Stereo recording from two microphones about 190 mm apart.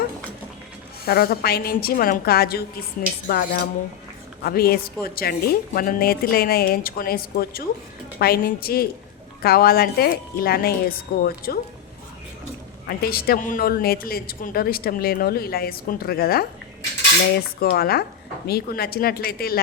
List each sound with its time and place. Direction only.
1.0 s a woman's voice: 55° left (ahead or behind)
12.9 s a woman's voice: 50° left (ahead or behind)
17.6 s a woman's voice: 55° left (ahead or behind)